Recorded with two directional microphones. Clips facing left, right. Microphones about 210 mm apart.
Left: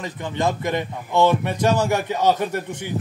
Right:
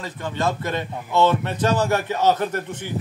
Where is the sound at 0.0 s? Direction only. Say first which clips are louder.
Left 1 dB; 15° left (ahead or behind).